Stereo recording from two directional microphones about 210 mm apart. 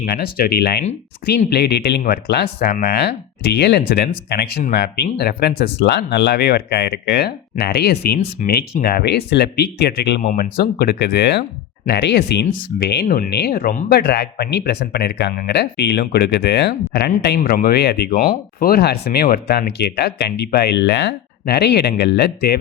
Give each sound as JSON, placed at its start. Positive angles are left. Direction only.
{"t": 0.0, "sound": "speech", "side_deg": 45}